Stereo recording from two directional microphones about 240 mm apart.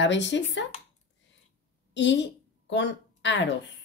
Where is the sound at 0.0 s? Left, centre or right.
Left.